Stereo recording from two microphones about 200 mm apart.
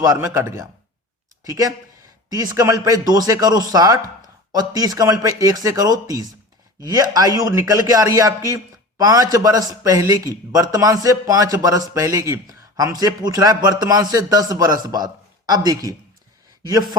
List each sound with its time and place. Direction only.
0.0 s a man's voice: 15° right (ahead or behind)